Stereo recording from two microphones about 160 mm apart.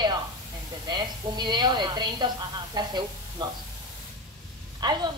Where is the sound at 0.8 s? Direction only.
25° right (ahead or behind).